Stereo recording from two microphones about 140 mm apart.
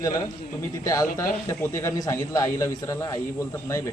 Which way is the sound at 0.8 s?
25° left (ahead or behind).